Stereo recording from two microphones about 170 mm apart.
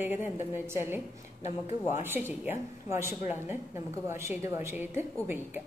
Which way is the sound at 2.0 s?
10° right (ahead or behind).